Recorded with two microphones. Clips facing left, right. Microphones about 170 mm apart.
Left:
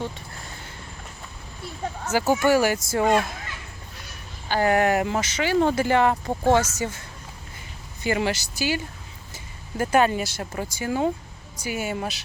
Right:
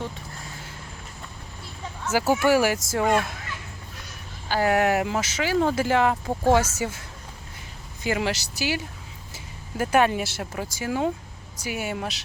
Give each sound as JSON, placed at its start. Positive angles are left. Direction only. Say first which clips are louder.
{"t": 1.8, "sound": "a sound", "louder": "left 7 dB", "side_deg": 50}
{"t": 2.1, "sound": "speech", "louder": "even", "side_deg": -5}
{"t": 3.0, "sound": "a child's voice", "louder": "left 2 dB", "side_deg": 25}
{"t": 4.4, "sound": "speech", "louder": "left 1 dB", "side_deg": -5}
{"t": 8.0, "sound": "speech", "louder": "left 2 dB", "side_deg": 0}